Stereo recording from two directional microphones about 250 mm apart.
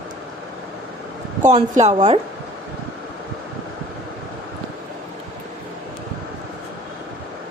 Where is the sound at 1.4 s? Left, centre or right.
Right.